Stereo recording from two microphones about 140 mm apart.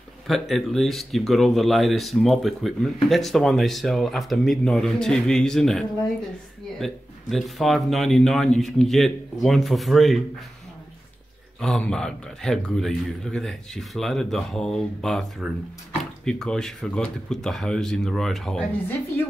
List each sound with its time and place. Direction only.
0.3 s speech: centre (ahead or behind)
11.6 s speech: 5° left (ahead or behind)